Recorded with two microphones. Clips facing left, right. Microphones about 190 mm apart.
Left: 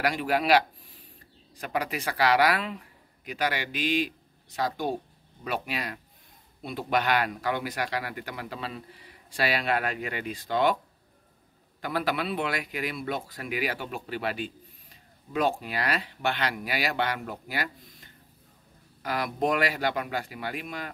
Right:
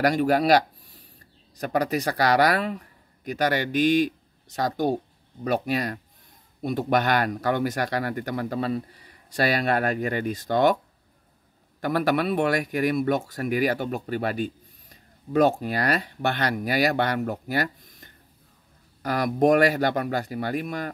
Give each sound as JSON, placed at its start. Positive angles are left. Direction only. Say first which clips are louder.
{"t": 0.0, "sound": "speech", "louder": "right 6 dB", "side_deg": -45}
{"t": 11.8, "sound": "speech", "louder": "right 6 dB", "side_deg": -50}